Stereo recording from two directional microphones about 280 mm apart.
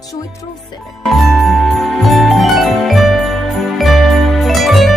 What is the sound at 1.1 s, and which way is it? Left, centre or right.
Jingle bell, centre.